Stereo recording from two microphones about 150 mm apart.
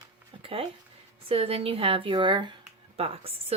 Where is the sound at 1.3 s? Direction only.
40° right (ahead or behind).